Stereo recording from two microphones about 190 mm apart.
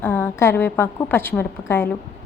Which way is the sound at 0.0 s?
10° left (ahead or behind).